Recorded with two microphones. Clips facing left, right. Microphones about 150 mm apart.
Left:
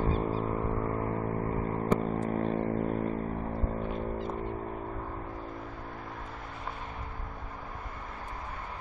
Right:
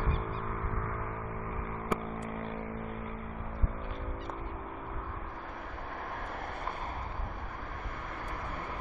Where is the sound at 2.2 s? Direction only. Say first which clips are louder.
Left 8 dB; 35° left (ahead or behind).